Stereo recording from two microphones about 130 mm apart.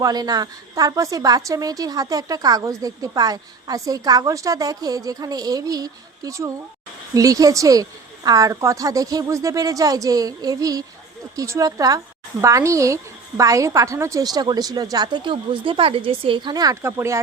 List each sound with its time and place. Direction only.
0.0 s a woman's voice: 30° right (ahead or behind)